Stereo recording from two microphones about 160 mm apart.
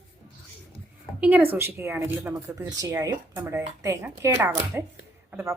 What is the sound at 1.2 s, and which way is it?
A woman's voice, 10° right (ahead or behind).